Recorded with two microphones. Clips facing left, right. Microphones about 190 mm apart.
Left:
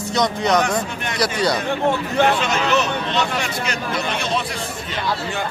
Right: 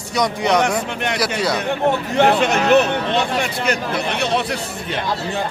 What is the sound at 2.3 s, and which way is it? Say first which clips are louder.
Speech: right 5 dB; 60° right (ahead or behind).